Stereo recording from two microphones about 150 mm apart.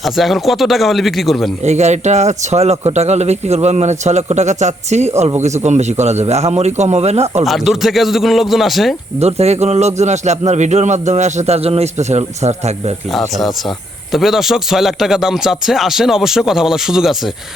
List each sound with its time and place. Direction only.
0.0 s speech: centre (ahead or behind)
1.6 s speech: 50° right (ahead or behind)
7.4 s speech: centre (ahead or behind)
9.1 s speech: 45° right (ahead or behind)
13.3 s speech: centre (ahead or behind)